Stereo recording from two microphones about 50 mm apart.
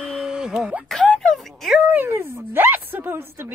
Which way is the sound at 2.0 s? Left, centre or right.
Right.